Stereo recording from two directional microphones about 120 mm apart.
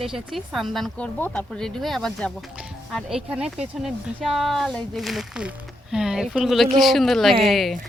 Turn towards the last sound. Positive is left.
turn(degrees=0)  # may be behind; listen again after turning